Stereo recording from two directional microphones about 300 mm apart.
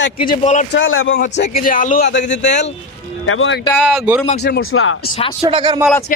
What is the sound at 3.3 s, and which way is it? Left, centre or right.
Speech, left.